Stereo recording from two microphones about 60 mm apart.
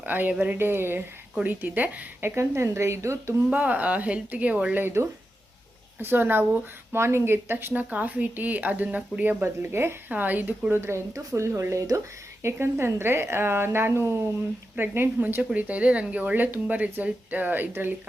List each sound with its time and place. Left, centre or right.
0.0 s speech: right
0.5 s speech: right
1.5 s speech: right
2.2 s speech: right
3.5 s speech: right
4.8 s speech: right
7.7 s speech: right
9.4 s speech: right
10.1 s speech: right
10.8 s speech: right
11.1 s speech: right
12.4 s speech: right
15.5 s speech: right